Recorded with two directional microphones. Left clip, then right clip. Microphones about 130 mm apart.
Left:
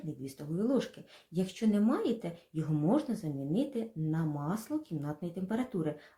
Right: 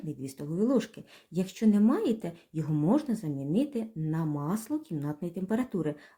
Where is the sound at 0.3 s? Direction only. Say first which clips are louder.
Right 4 dB; 40° right (ahead or behind).